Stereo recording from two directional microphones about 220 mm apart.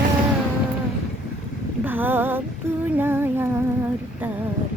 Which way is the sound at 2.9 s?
10° right (ahead or behind).